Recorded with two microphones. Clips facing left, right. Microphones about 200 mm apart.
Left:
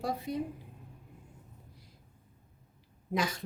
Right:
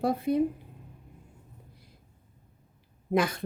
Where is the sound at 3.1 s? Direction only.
55° right (ahead or behind).